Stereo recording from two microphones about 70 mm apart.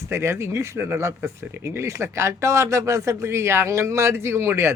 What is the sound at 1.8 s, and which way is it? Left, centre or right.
A man's voice, right.